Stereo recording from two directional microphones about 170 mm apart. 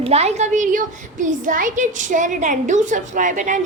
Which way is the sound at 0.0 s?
40° right (ahead or behind).